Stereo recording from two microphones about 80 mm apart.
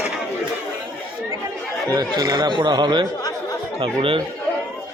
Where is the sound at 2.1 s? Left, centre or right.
Right.